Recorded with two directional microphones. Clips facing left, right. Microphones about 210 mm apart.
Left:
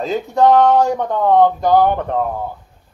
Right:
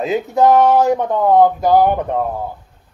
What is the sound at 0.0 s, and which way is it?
Speech, 5° right (ahead or behind).